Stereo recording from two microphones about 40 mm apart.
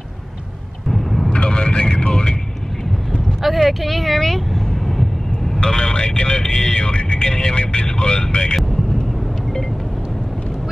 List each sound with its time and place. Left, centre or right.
0.8 s vehicle: centre
1.3 s vehicle: left
3.4 s vehicle: centre
5.6 s vehicle: left